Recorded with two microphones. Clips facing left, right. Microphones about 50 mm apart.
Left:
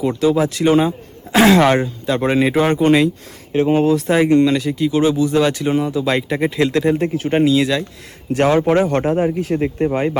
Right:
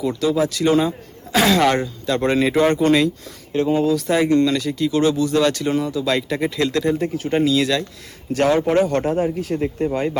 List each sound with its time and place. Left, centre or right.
0.0 s speech: left
7.4 s speech: centre
8.3 s speech: left